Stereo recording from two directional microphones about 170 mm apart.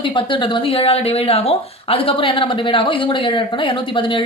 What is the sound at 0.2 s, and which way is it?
Speech, 30° left (ahead or behind).